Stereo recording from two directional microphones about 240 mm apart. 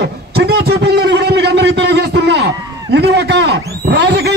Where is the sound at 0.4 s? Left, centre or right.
Right.